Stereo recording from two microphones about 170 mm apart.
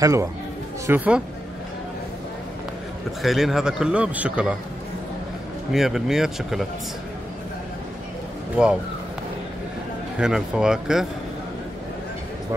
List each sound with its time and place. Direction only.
0.0 s speech: 20° right (ahead or behind)
3.2 s a man's voice: centre (ahead or behind)
5.7 s a man's voice: centre (ahead or behind)
10.1 s a man's voice: 5° right (ahead or behind)